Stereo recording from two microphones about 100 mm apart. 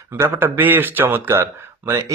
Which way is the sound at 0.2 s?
20° right (ahead or behind).